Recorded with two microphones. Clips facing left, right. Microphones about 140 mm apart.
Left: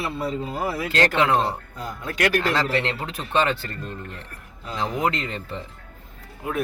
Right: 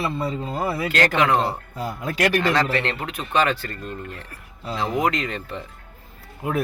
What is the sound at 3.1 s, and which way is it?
Speech, 30° left (ahead or behind).